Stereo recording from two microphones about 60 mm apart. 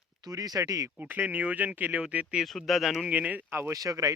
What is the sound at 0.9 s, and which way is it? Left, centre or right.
Speech, right.